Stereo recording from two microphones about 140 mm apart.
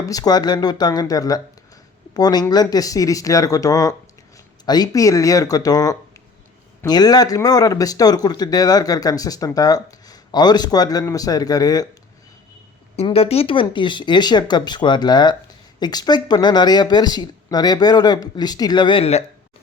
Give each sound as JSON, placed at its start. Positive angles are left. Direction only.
{"t": 0.0, "sound": "speech", "side_deg": 25}
{"t": 13.1, "sound": "speech", "side_deg": 45}